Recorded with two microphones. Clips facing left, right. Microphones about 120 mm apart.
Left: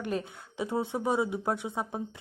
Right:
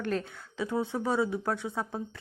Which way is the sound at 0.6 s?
25° left (ahead or behind).